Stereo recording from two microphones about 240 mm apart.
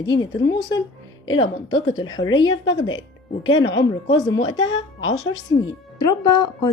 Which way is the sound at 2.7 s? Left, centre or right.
Centre.